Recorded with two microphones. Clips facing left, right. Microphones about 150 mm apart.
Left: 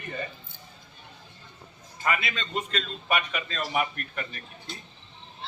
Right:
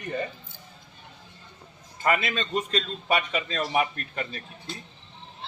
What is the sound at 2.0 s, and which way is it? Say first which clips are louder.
A man's voice: right 4 dB; 45° right (ahead or behind).